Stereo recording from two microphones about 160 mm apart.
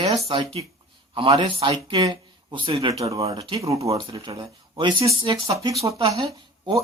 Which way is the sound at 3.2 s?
35° right (ahead or behind).